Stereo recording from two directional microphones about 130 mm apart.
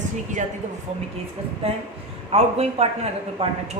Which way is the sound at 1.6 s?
50° right (ahead or behind).